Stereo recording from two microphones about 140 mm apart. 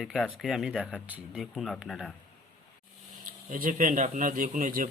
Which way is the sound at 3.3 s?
80° right.